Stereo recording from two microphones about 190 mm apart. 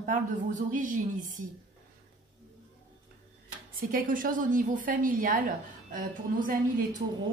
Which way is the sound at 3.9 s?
45° right (ahead or behind).